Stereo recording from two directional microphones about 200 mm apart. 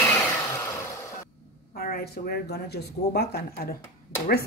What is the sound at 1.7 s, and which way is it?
Speech, 50° left (ahead or behind).